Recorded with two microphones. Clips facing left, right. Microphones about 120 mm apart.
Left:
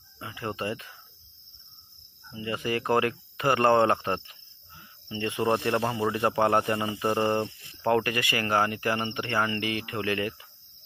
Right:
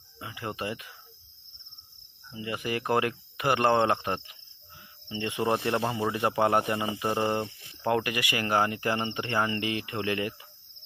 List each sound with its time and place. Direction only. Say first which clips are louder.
0.2 s speech: left 2 dB; 15° right (ahead or behind)
2.3 s speech: left 2 dB; 20° right (ahead or behind)